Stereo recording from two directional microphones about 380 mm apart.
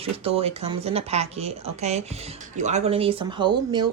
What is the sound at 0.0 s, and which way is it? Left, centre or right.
Speech, centre.